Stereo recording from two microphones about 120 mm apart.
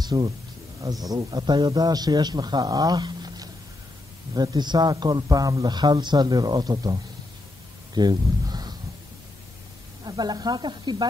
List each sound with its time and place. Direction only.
0.0 s a man's voice: 35° right (ahead or behind)
7.9 s a sound: 35° right (ahead or behind)
10.0 s a man's voice: 35° right (ahead or behind)